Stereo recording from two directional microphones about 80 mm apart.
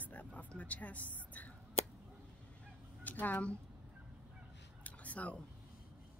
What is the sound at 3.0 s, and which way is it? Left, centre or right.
Speech, left.